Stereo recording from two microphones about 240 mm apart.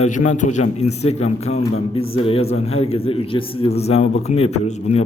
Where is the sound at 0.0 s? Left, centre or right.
Left.